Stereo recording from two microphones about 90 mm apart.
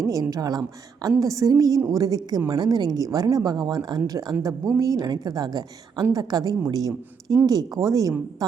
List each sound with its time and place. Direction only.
0.0 s a woman's voice: 40° right (ahead or behind)